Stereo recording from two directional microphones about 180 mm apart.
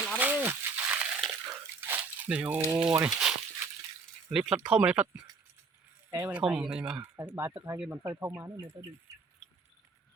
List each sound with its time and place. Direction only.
0.1 s slosh: 10° right (ahead or behind)
4.3 s speech: 5° right (ahead or behind)
5.1 s speech: 25° right (ahead or behind)
6.4 s speech: centre (ahead or behind)